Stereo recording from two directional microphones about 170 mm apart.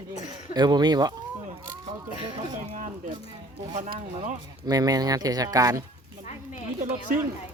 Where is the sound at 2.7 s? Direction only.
50° right (ahead or behind).